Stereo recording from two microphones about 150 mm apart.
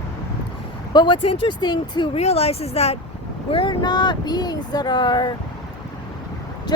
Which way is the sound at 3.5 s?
30° left (ahead or behind).